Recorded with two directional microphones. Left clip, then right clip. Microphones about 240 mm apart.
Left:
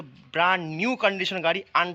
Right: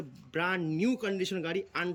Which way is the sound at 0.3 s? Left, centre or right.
Centre.